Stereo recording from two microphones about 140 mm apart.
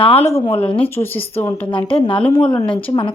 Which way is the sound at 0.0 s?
45° left (ahead or behind).